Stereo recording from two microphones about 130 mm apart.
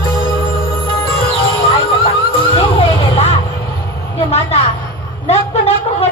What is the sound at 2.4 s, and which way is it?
Music, 45° left (ahead or behind).